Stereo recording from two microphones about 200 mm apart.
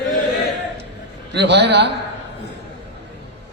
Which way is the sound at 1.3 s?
60° right (ahead or behind).